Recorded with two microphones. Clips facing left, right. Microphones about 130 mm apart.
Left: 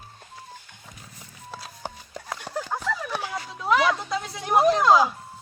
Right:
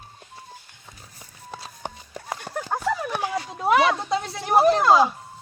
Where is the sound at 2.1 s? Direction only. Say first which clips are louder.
Right 1 dB; 10° right (ahead or behind).